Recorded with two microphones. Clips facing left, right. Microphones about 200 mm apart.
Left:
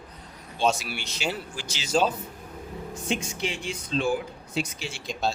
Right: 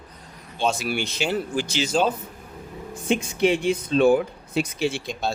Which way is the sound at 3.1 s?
55° right (ahead or behind).